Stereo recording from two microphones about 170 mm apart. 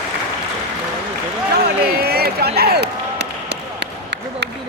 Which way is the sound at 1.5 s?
65° right (ahead or behind).